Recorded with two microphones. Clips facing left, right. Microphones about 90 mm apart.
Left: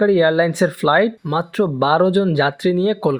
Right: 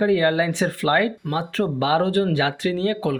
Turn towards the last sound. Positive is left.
turn(degrees=20)  # may be behind; listen again after turning